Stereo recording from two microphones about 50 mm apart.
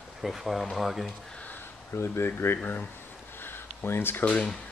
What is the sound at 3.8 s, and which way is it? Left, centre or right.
Speech, left.